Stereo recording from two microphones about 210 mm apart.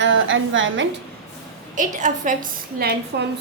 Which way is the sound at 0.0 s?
65° right (ahead or behind).